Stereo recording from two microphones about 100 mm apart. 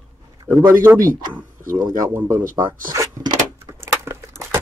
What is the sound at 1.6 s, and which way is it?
Speech, 40° right (ahead or behind).